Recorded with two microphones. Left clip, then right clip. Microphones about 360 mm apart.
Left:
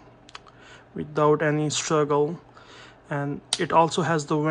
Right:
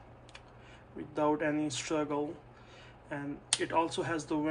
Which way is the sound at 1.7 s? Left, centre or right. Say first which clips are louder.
Left 11 dB; centre.